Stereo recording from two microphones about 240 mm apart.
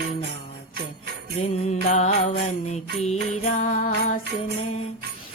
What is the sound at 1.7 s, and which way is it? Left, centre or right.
Music, left.